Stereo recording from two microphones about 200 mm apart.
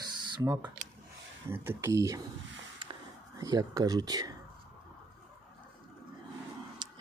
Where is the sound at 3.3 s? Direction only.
20° right (ahead or behind).